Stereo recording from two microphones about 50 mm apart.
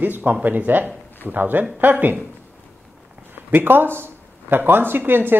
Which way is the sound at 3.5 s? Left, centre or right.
Right.